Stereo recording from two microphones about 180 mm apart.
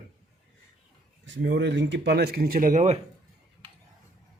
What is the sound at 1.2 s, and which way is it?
Speech, 85° right.